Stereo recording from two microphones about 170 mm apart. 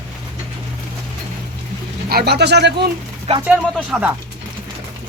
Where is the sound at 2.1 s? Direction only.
70° right (ahead or behind).